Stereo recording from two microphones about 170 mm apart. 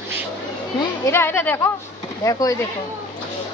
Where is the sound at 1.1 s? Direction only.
15° left (ahead or behind).